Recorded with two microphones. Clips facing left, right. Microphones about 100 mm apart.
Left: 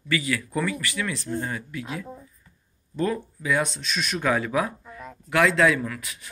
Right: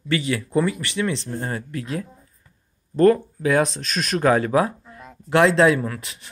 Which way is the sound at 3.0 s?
55° right (ahead or behind).